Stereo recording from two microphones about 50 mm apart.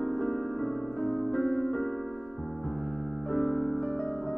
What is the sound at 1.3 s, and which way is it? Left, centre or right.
Music, left.